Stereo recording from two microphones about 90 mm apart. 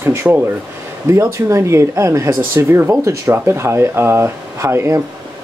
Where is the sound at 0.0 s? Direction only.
25° right (ahead or behind).